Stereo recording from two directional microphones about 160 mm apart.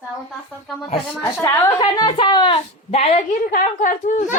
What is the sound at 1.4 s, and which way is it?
A woman's voice, 25° left (ahead or behind).